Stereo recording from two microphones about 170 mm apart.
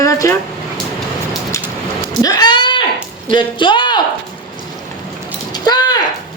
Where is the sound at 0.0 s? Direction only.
20° left (ahead or behind).